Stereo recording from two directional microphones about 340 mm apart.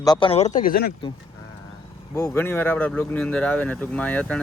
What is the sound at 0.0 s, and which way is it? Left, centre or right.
Speech, centre.